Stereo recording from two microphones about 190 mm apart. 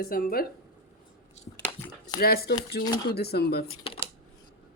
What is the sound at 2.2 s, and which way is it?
Speech, 55° left (ahead or behind).